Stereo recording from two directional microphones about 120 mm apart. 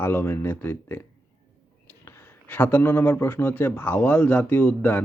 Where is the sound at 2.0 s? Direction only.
20° left (ahead or behind).